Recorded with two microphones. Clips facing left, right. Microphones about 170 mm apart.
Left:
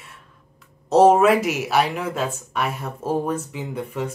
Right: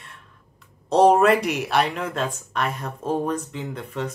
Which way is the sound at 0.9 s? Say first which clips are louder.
Left 2 dB; 5° left (ahead or behind).